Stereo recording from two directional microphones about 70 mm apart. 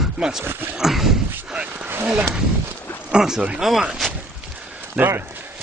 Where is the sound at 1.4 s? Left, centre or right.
Centre.